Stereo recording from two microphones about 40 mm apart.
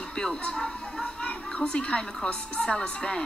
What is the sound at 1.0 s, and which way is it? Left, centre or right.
A woman's voice, left.